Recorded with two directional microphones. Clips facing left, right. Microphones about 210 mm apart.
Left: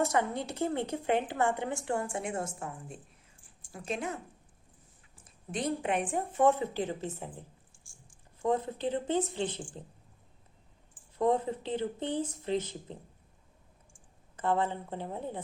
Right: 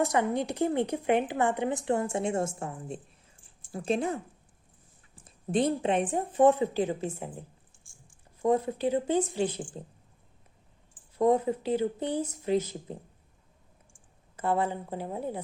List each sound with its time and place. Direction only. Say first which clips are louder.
0.0 s a woman's voice: right 3 dB; 15° right (ahead or behind)
11.2 s speech: right 4 dB; 10° right (ahead or behind)
14.4 s speech: right 2 dB; 10° right (ahead or behind)